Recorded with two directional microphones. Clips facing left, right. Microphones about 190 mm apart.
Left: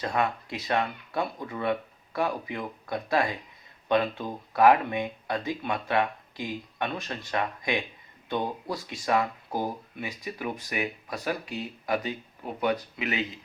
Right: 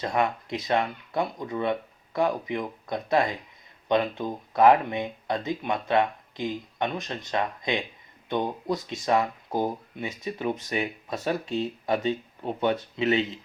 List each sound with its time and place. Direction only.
0.0 s speech: 20° right (ahead or behind)